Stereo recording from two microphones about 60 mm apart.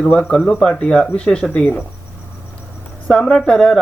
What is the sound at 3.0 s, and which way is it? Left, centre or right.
Speech, centre.